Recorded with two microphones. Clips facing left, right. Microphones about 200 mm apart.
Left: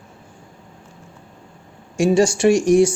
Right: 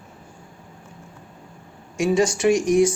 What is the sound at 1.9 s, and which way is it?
Speech, 30° left (ahead or behind).